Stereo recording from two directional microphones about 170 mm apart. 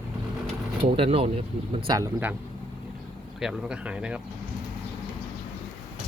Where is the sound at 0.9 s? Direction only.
35° right (ahead or behind).